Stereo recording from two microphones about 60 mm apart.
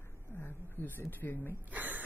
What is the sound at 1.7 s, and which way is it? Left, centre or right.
Speech, right.